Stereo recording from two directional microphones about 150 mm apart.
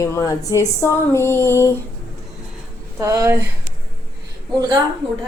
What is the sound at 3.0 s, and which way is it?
Speech, 20° right (ahead or behind).